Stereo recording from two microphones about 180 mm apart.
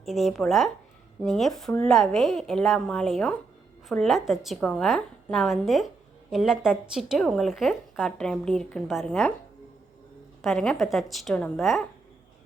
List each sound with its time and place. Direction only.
0.0 s speech: centre (ahead or behind)
10.4 s speech: centre (ahead or behind)